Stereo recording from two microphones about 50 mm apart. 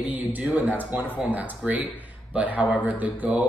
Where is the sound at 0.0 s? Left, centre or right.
Right.